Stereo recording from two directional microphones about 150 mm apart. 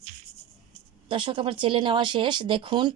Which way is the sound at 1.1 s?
35° right (ahead or behind).